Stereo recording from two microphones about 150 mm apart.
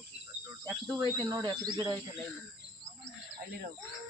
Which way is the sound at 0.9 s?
25° right (ahead or behind).